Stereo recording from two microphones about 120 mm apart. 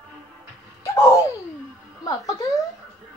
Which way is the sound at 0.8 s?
25° left (ahead or behind).